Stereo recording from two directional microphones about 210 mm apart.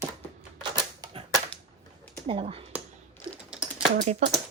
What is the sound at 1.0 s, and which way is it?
Typewriter, 20° right (ahead or behind).